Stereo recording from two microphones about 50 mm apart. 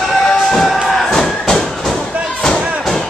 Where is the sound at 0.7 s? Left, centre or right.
Centre.